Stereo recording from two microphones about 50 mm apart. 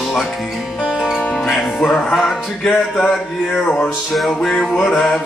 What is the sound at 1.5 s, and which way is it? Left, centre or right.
Music, centre.